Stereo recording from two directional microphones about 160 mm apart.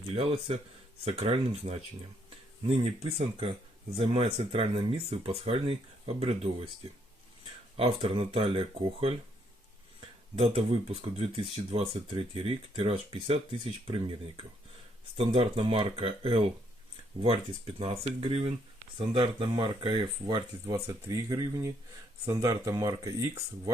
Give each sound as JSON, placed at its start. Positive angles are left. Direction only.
{"t": 0.0, "sound": "speech", "side_deg": -40}
{"t": 7.8, "sound": "speech", "side_deg": -35}